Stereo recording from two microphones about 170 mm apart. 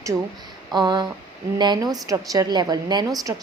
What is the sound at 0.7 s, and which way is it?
A woman's voice, 25° right (ahead or behind).